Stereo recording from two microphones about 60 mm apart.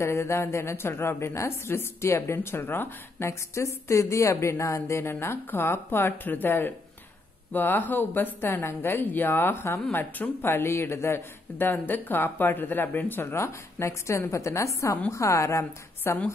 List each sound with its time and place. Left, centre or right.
0.0 s a man's voice: left
3.3 s a man's voice: left
9.8 s speech: left
10.4 s a man's voice: left